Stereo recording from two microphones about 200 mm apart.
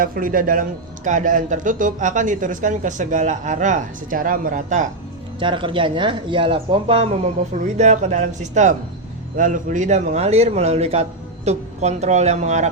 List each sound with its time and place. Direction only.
0.0 s speech: 45° right (ahead or behind)
5.4 s speech: 25° right (ahead or behind)